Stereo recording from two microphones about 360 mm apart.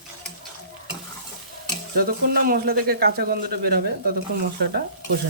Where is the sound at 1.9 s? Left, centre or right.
Right.